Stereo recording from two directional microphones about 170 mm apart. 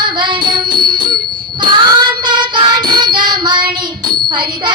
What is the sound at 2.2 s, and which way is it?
Child singing, 25° right (ahead or behind).